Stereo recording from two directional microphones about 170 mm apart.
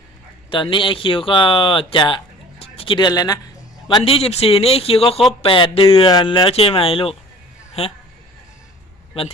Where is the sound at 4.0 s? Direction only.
35° left (ahead or behind).